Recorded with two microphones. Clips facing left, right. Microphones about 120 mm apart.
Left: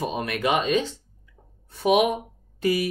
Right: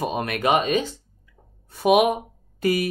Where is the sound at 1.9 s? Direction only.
55° right (ahead or behind).